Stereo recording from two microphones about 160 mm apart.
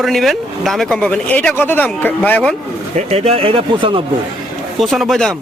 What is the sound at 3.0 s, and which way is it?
Speech, 40° right (ahead or behind).